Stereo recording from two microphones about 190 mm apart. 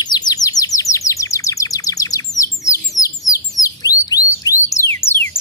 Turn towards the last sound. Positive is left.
turn(degrees=10)  # may be behind; listen again after turning